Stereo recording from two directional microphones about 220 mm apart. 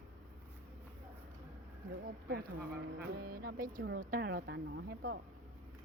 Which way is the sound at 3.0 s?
45° right (ahead or behind).